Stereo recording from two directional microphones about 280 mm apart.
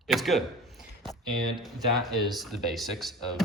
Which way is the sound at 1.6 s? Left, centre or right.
Centre.